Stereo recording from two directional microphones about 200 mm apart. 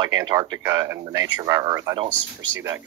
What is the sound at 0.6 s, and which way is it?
Speech, 15° right (ahead or behind).